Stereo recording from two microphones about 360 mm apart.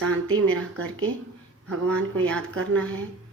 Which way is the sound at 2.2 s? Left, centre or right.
Centre.